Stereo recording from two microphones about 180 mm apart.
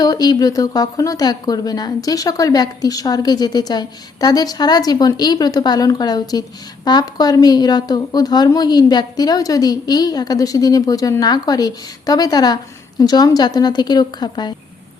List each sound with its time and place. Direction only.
0.0 s speech: 20° left (ahead or behind)